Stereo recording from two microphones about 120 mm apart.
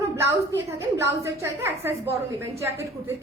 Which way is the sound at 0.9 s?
25° right (ahead or behind).